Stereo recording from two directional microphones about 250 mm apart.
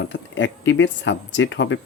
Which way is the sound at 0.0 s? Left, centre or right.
Left.